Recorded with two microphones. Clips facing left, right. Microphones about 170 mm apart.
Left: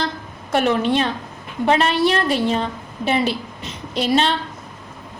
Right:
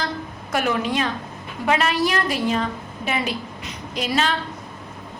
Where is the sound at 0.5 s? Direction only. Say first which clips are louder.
Left 5 dB; 25° left (ahead or behind).